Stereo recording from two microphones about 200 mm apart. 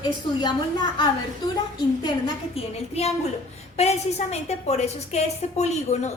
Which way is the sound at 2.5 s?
30° left (ahead or behind).